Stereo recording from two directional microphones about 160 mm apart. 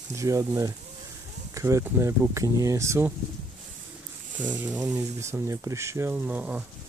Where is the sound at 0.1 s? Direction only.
20° right (ahead or behind).